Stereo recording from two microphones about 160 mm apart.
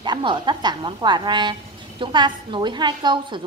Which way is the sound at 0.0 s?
30° right (ahead or behind).